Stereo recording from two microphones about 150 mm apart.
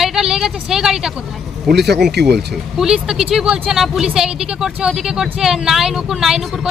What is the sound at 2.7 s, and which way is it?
Speech, 5° right (ahead or behind).